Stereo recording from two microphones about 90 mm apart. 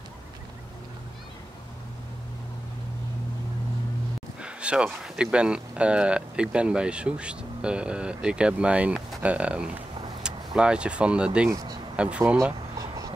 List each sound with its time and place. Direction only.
4.4 s speech: 10° right (ahead or behind)
11.5 s speech: 45° right (ahead or behind)
12.0 s speech: 15° right (ahead or behind)